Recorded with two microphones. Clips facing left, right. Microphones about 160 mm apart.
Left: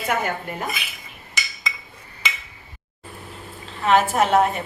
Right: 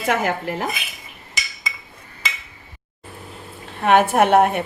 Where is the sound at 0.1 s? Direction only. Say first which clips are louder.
Right 4 dB; 90° right.